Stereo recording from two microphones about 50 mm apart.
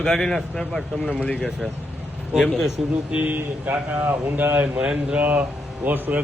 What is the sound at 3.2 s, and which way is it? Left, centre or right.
Speech, right.